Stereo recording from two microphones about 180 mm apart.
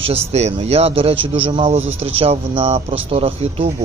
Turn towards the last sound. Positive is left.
turn(degrees=-35)  # may be behind; listen again after turning